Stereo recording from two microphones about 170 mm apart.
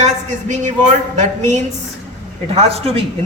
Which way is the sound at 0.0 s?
45° right (ahead or behind).